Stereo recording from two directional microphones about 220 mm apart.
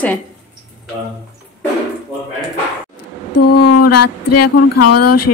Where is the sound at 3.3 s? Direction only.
90° left.